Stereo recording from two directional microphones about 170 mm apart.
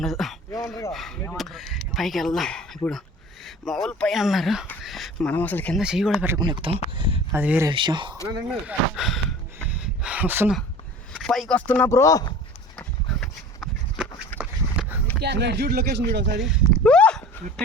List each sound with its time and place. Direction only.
0.0 s speech: centre (ahead or behind)
5.8 s speech: 5° right (ahead or behind)
6.4 s speech: 25° right (ahead or behind)
7.3 s speech: 10° right (ahead or behind)
7.7 s speech: 30° right (ahead or behind)
8.4 s speech: 5° right (ahead or behind)
9.6 s a sound: 5° right (ahead or behind)
11.1 s speech: centre (ahead or behind); by 12.3 s 20° left (ahead or behind)
12.7 s horse: 5° left (ahead or behind)
14.3 s a sound: 10° right (ahead or behind)
15.2 s speech: 80° right
16.4 s a sound: 5° left (ahead or behind)